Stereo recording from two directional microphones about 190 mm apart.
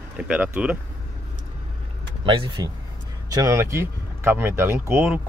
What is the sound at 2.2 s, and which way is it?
Speech, 25° right (ahead or behind).